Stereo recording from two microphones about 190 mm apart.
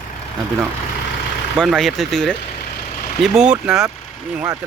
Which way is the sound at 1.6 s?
Centre (ahead or behind).